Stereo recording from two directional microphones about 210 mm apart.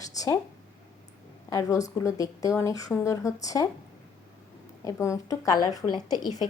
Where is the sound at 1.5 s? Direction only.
15° left (ahead or behind).